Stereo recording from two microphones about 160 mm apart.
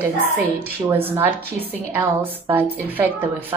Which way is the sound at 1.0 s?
15° right (ahead or behind).